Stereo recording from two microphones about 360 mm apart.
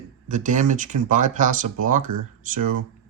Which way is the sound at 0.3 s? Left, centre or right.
Right.